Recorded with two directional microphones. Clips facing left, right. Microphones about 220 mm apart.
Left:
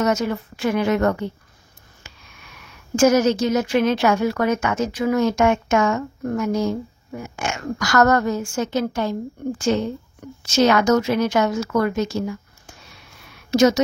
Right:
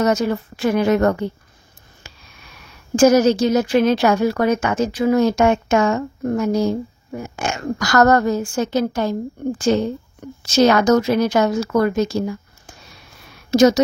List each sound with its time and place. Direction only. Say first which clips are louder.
0.0 s a woman's voice: right 3 dB; 35° right (ahead or behind)
3.0 s a woman's voice: right 3 dB; 35° right (ahead or behind)